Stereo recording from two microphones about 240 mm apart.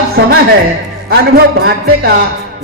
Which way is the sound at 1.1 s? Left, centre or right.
Right.